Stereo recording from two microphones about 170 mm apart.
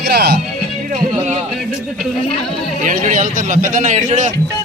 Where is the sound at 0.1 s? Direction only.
70° right (ahead or behind).